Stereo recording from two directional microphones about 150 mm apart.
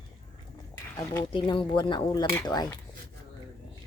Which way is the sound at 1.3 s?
35° left (ahead or behind).